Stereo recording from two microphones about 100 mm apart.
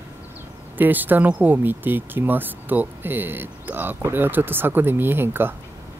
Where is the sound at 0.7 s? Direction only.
20° right (ahead or behind).